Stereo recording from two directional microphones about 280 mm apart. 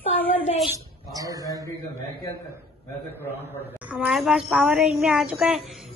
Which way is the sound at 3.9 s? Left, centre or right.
Centre.